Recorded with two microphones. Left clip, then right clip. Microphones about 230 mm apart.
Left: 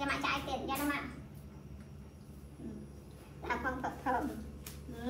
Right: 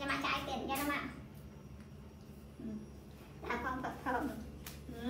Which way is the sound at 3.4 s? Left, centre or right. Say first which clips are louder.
Left 2 dB; centre.